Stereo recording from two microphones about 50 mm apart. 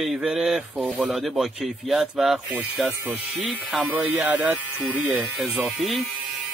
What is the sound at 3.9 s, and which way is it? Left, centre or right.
Speech, right.